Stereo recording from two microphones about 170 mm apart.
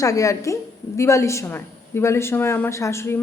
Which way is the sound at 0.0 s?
20° left (ahead or behind).